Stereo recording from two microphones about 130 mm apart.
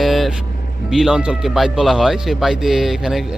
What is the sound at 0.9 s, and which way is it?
Speech, 5° right (ahead or behind).